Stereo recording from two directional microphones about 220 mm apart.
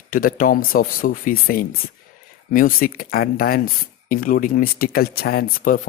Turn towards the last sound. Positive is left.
turn(degrees=40)  # may be behind; listen again after turning